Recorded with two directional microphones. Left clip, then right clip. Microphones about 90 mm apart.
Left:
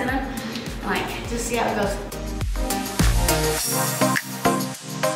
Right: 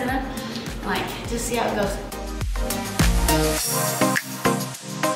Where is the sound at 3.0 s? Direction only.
Centre (ahead or behind).